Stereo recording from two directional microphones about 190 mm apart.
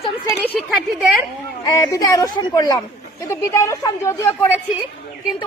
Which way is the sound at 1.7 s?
20° left (ahead or behind).